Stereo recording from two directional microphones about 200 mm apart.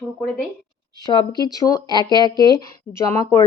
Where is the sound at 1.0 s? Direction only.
20° left (ahead or behind).